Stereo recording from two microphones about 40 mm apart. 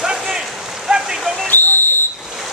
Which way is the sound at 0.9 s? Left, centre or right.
Right.